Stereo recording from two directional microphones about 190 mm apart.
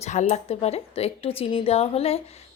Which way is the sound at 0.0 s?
35° left (ahead or behind).